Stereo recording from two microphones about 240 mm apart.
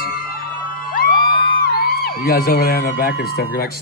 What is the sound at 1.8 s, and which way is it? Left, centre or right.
Speech, left.